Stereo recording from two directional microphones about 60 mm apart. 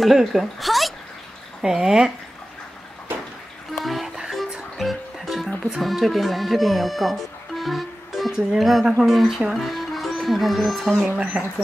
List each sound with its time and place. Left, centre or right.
0.0 s a woman's voice: centre
3.7 s music: centre
5.8 s speech: centre
11.1 s speech: right